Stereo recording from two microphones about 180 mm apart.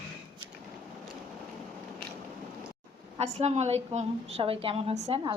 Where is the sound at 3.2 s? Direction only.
40° right (ahead or behind).